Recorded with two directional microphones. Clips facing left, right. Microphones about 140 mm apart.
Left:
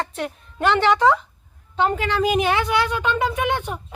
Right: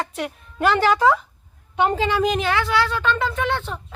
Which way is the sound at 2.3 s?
20° left (ahead or behind).